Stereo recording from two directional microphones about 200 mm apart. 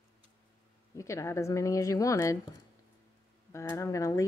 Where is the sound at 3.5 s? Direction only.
15° left (ahead or behind).